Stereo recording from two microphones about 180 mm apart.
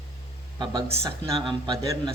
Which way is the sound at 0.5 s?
25° right (ahead or behind).